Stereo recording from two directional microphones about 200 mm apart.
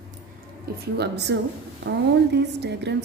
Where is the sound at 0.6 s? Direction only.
55° right (ahead or behind).